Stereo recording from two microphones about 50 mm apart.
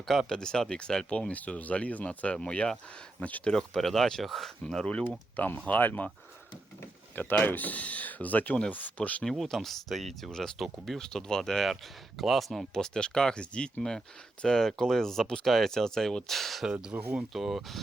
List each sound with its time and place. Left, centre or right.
0.0 s speech: centre
0.3 s speech: centre; by 2.3 s left
2.3 s speech: centre
3.2 s speech: left
3.5 s speech: centre
4.6 s speech: centre
5.6 s speech: left
7.4 s speech: left
9.3 s speech: centre
12.7 s speech: centre
16.9 s speech: right
17.3 s speech: centre